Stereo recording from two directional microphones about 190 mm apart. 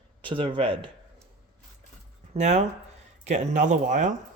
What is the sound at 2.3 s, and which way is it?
Speech, 35° right (ahead or behind).